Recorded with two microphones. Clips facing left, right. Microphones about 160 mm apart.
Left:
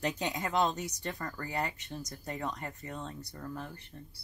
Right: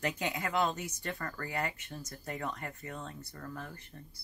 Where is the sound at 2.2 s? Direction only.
20° left (ahead or behind).